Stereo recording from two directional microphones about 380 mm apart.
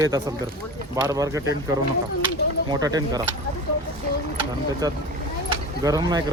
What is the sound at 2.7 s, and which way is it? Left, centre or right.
Speech, centre.